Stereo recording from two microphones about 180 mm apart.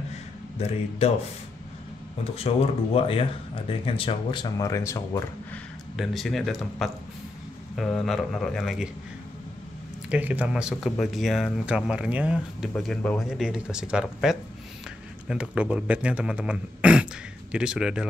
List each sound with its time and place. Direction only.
0.6 s speech: 35° left (ahead or behind)
2.3 s speech: 35° left (ahead or behind); by 5.6 s 15° left (ahead or behind)
5.9 s speech: centre (ahead or behind)
10.0 s speech: 10° right (ahead or behind)